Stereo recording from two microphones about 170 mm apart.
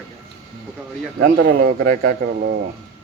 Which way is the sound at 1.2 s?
60° right (ahead or behind).